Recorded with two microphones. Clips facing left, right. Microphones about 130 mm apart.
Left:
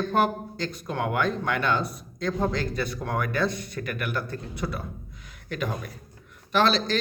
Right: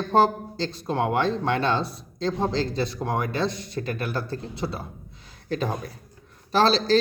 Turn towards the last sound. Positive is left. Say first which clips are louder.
# right 3 dB
turn(degrees=-35)  # may be behind; listen again after turning